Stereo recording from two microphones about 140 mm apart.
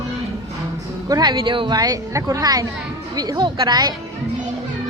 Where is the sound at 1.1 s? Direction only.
30° right (ahead or behind).